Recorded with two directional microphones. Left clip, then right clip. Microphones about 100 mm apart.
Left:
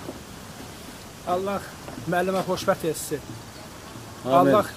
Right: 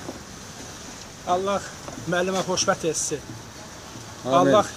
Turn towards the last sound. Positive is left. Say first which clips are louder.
# left 1 dB
turn(degrees=-20)  # may be behind; listen again after turning